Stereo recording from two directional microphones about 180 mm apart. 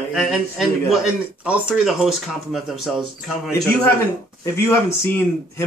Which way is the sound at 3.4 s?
15° left (ahead or behind).